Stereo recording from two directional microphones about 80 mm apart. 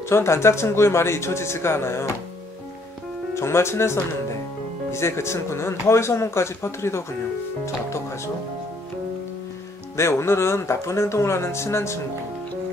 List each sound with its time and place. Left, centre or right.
0.1 s speech: left
3.3 s speech: left
9.9 s speech: left